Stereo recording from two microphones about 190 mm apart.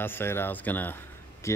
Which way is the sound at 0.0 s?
10° left (ahead or behind).